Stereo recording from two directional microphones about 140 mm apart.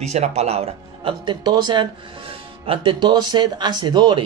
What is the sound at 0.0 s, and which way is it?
A woman's voice, 50° right (ahead or behind).